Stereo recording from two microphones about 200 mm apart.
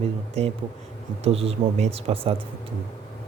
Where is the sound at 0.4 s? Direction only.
30° right (ahead or behind).